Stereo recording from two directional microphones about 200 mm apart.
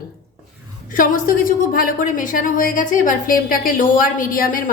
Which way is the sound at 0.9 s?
45° left (ahead or behind).